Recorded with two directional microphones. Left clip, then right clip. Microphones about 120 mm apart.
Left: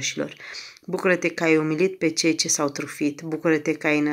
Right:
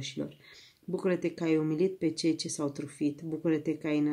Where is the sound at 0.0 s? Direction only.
30° right (ahead or behind).